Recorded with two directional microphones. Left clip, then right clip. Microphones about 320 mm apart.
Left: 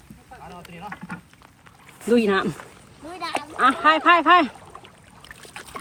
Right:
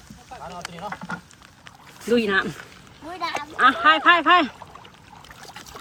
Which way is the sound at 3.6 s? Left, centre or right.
Centre.